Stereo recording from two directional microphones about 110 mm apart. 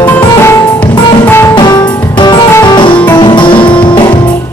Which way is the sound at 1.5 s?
40° left (ahead or behind).